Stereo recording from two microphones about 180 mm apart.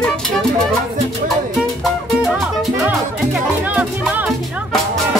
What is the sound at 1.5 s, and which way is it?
Music, centre (ahead or behind).